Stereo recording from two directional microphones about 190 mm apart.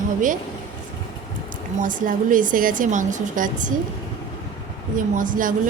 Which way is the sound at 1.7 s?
45° right (ahead or behind).